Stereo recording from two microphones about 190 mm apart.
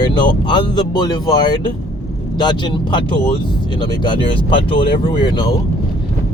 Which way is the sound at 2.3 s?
25° left (ahead or behind).